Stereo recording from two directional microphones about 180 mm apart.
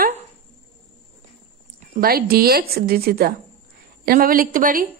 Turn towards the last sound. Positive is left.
turn(degrees=-50)  # may be behind; listen again after turning